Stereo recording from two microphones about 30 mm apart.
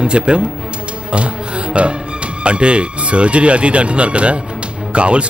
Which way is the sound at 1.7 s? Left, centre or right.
Right.